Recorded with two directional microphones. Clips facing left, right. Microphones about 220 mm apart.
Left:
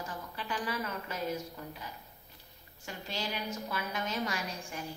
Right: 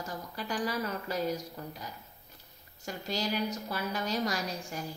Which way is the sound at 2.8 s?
40° right (ahead or behind).